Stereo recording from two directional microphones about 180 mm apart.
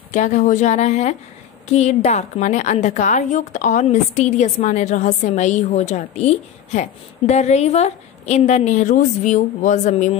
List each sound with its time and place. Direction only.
0.1 s a woman's voice: 45° left (ahead or behind)